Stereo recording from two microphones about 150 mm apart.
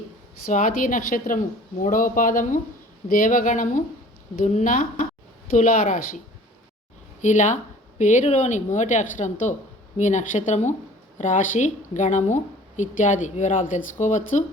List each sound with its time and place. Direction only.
0.4 s a woman's voice: 60° left (ahead or behind)
7.2 s a woman's voice: 55° left (ahead or behind)